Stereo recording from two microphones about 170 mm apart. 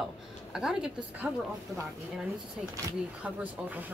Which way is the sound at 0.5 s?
5° right (ahead or behind).